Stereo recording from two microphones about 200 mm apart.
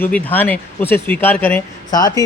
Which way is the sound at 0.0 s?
10° left (ahead or behind).